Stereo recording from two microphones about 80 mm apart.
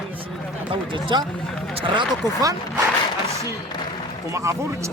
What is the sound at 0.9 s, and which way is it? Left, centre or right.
Speech, right.